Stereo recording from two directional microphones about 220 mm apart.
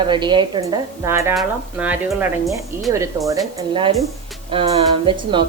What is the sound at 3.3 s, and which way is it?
A woman's voice, 15° right (ahead or behind).